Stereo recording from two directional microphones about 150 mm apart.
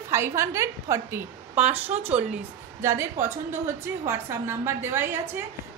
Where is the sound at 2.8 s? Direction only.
20° right (ahead or behind).